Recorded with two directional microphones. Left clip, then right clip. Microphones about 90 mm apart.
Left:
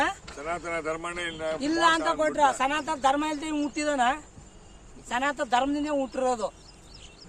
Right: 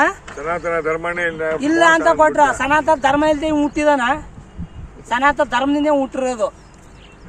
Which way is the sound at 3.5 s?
70° left (ahead or behind).